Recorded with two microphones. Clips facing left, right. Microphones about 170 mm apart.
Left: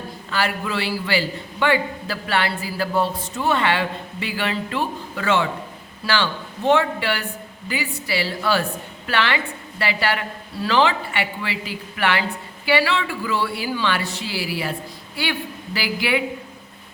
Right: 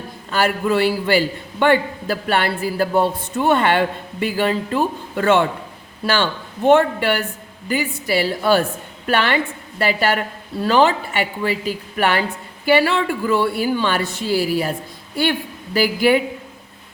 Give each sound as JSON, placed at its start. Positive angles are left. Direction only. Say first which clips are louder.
{"t": 0.3, "sound": "a man's voice", "louder": "right 6 dB", "side_deg": -45}
{"t": 6.7, "sound": "a man's voice", "louder": "right 5 dB", "side_deg": -50}